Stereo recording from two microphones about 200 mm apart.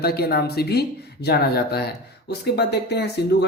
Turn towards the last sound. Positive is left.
turn(degrees=55)  # may be behind; listen again after turning